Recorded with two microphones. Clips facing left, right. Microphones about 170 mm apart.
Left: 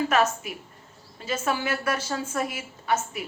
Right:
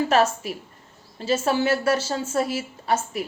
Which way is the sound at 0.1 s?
35° right (ahead or behind).